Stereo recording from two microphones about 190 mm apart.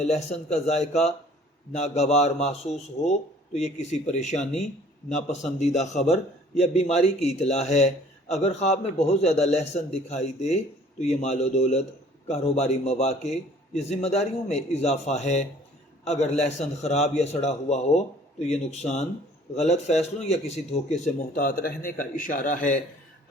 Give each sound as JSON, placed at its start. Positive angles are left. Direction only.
{"t": 0.0, "sound": "a man's voice", "side_deg": 35}